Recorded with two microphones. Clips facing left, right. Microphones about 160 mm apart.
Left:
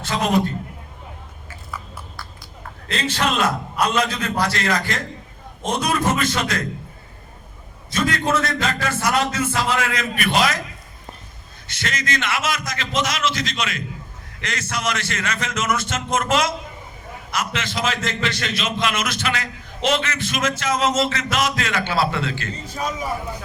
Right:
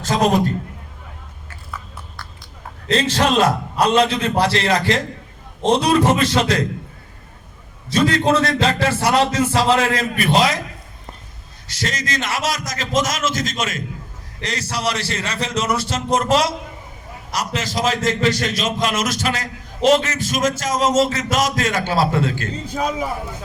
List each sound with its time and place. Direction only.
0.0 s a man's voice: 40° right (ahead or behind)
2.9 s a man's voice: 35° right (ahead or behind)
7.9 s a man's voice: 30° right (ahead or behind)
11.7 s a man's voice: 35° right (ahead or behind)